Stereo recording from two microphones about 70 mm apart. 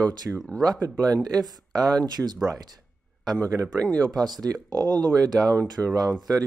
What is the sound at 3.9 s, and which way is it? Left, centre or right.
Speech, right.